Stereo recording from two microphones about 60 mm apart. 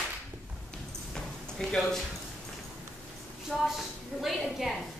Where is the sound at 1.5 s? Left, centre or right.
Centre.